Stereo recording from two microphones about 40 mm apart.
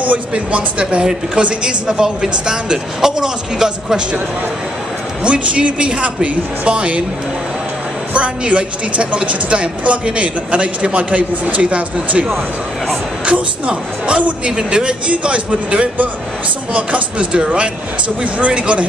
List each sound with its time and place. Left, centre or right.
0.3 s a woman's voice: right
5.2 s a woman's voice: right
8.1 s a woman's voice: right